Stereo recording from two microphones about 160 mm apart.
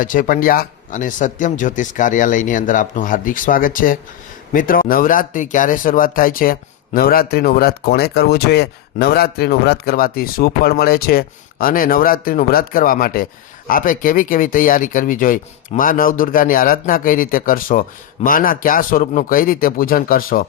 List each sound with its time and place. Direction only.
0.0 s speech: 55° left (ahead or behind)